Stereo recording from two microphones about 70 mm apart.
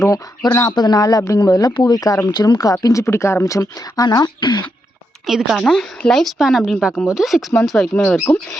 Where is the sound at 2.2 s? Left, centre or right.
Left.